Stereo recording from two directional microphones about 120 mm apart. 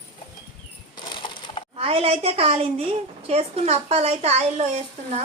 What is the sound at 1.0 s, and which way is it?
Splinter, 45° left (ahead or behind).